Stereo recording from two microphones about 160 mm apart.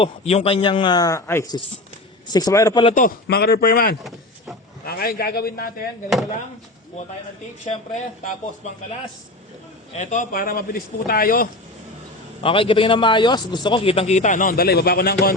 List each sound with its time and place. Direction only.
0.0 s speech: 40° left (ahead or behind); by 2.8 s 20° left (ahead or behind)
2.9 s a man's voice: 65° left (ahead or behind)
7.6 s a woman's voice: 50° left (ahead or behind)
9.9 s a man's voice: 50° left (ahead or behind)
12.4 s a man's voice: 30° left (ahead or behind); by 15.4 s 70° left (ahead or behind)